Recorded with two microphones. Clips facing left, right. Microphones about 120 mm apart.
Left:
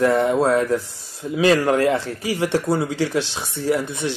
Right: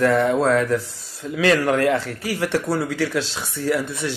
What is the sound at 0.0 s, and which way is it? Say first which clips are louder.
A man's voice: even; 20° left (ahead or behind).